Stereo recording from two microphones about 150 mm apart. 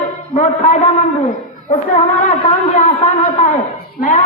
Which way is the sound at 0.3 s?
55° left (ahead or behind).